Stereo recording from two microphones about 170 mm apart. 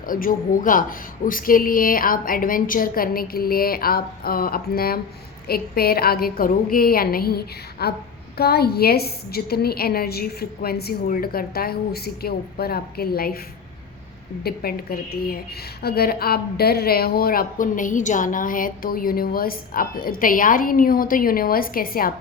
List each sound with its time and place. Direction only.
0.0 s a woman's voice: 55° left (ahead or behind)
14.4 s a woman's voice: 65° left (ahead or behind)